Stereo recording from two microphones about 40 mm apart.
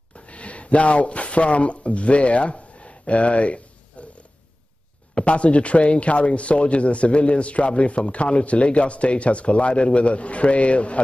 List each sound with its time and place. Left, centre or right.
0.1 s speech: left
3.9 s a sound: left
5.1 s speech: left